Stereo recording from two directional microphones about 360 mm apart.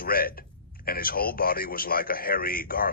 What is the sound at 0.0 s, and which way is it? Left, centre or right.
A man's voice, left.